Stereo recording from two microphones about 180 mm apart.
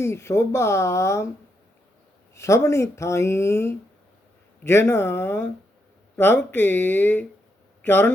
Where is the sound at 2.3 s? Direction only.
15° left (ahead or behind).